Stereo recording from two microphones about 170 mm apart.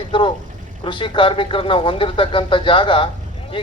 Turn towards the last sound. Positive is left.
turn(degrees=30)  # may be behind; listen again after turning